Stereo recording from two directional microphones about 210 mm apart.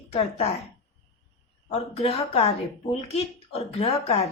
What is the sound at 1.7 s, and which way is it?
A woman's voice, 30° left (ahead or behind).